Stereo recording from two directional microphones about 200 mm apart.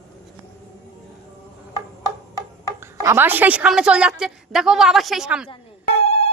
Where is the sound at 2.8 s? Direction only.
15° right (ahead or behind).